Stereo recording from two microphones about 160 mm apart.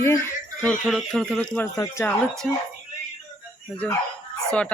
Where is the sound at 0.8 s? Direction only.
Centre (ahead or behind); by 2.1 s 15° left (ahead or behind).